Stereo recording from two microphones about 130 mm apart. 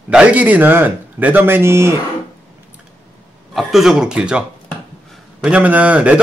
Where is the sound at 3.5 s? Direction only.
Centre (ahead or behind).